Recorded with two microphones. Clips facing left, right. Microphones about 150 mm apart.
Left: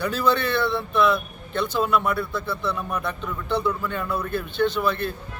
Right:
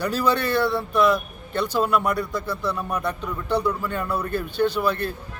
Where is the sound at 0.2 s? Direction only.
10° right (ahead or behind).